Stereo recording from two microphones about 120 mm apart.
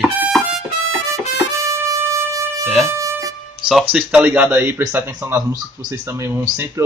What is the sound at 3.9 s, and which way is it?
A man's voice, 10° right (ahead or behind).